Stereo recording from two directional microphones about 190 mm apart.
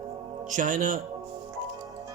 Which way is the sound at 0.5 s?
45° right (ahead or behind).